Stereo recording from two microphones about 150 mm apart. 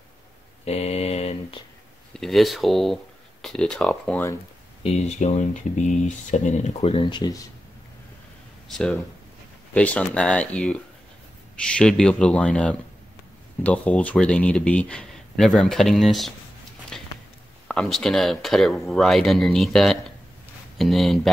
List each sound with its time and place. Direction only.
0.7 s mantra: 45° left (ahead or behind)
2.1 s speech: centre (ahead or behind)
4.8 s speech: 50° left (ahead or behind); by 7.3 s 30° left (ahead or behind)
8.6 s speech: centre (ahead or behind)
16.9 s a sound: 5° left (ahead or behind)
17.6 s speech: 5° left (ahead or behind)